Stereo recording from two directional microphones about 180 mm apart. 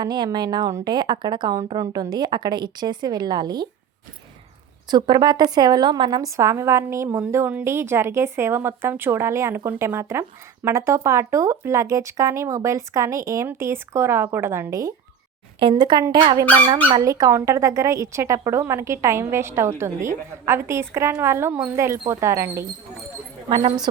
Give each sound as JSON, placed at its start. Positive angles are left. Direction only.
{"t": 0.0, "sound": "a woman's voice", "side_deg": -25}
{"t": 4.9, "sound": "a woman's voice", "side_deg": -25}